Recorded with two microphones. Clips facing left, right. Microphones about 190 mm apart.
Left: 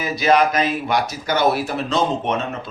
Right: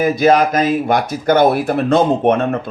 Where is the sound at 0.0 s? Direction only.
50° right (ahead or behind).